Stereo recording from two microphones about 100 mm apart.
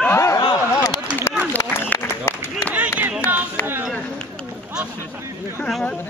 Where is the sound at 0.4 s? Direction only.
40° left (ahead or behind).